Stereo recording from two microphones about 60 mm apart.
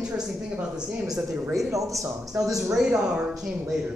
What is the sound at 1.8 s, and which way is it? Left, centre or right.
Speech, right.